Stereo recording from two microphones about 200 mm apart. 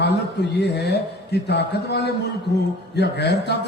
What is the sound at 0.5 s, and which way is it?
A man's voice, 55° left (ahead or behind).